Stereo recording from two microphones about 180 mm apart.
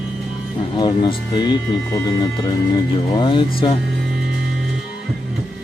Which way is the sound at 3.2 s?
25° left (ahead or behind).